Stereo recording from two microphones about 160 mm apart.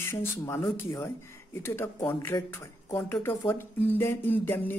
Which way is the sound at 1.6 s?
15° left (ahead or behind).